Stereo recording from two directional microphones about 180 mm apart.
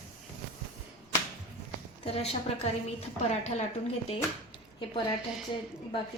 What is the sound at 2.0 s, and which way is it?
Speech, 35° left (ahead or behind).